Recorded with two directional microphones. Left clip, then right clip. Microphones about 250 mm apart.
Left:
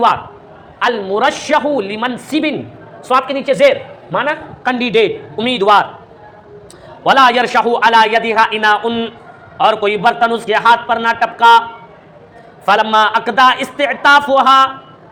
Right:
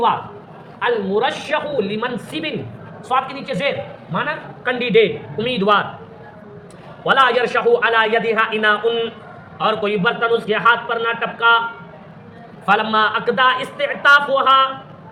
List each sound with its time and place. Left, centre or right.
0.8 s a woman's voice: left
7.0 s a woman's voice: left
12.6 s a woman's voice: left